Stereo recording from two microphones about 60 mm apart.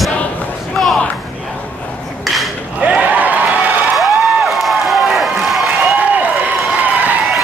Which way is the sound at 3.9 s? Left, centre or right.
Centre.